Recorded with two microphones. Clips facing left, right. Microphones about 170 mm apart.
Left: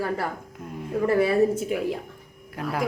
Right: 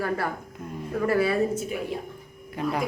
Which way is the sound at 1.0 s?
25° left (ahead or behind).